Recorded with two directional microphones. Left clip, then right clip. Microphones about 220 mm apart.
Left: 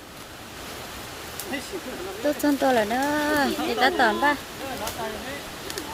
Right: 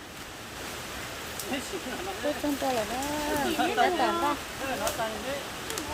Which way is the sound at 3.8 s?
35° left (ahead or behind).